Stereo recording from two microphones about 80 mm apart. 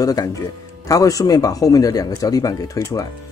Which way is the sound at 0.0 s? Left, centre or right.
Left.